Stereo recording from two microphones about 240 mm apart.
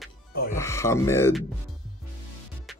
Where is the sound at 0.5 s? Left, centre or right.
Centre.